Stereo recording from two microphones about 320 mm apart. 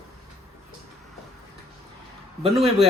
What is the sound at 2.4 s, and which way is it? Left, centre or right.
Speech, centre.